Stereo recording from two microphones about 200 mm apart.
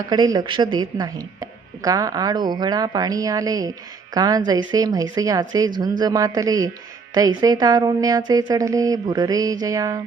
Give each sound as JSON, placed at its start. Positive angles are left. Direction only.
{"t": 0.1, "sound": "speech", "side_deg": -20}
{"t": 6.0, "sound": "music", "side_deg": -20}
{"t": 7.1, "sound": "speech", "side_deg": -20}
{"t": 8.3, "sound": "music", "side_deg": -20}